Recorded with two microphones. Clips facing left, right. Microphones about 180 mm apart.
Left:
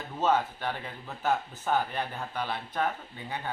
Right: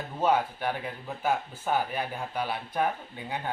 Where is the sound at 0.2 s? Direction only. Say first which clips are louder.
Right 1 dB; 10° right (ahead or behind).